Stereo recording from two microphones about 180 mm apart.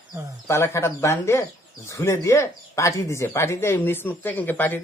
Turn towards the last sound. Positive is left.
turn(degrees=10)  # may be behind; listen again after turning